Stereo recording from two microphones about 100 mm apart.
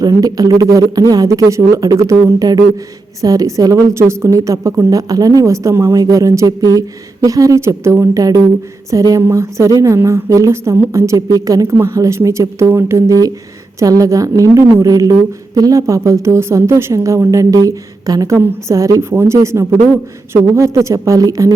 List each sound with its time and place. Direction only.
0.0 s a woman's voice: 40° right (ahead or behind)